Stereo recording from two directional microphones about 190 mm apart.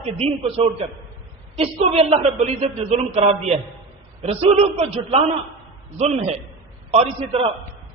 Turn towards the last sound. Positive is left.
turn(degrees=-30)  # may be behind; listen again after turning